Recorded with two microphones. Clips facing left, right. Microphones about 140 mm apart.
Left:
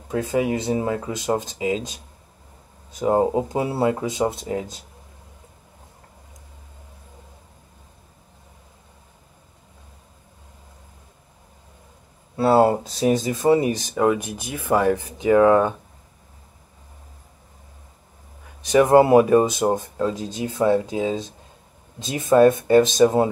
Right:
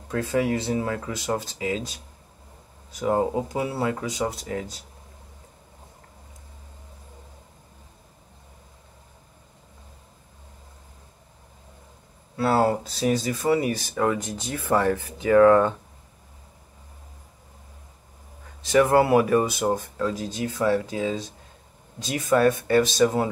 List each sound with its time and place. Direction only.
0.1 s speech: 20° left (ahead or behind)
12.4 s speech: 25° left (ahead or behind)
18.6 s speech: 20° left (ahead or behind)